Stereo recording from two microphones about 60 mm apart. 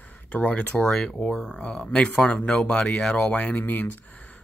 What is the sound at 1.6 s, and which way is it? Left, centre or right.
Speech, centre.